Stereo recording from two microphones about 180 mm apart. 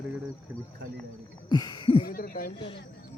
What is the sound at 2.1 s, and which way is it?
Speech, 55° left (ahead or behind).